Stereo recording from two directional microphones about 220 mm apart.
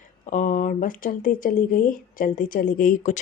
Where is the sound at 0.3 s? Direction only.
35° left (ahead or behind).